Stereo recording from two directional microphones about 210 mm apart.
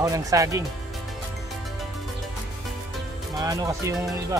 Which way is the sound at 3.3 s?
15° right (ahead or behind).